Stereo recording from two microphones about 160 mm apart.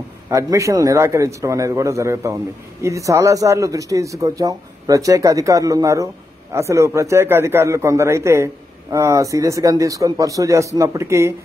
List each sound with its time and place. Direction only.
0.3 s a man's voice: 20° right (ahead or behind)